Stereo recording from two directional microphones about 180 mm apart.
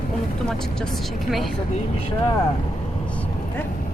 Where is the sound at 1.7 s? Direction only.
35° left (ahead or behind).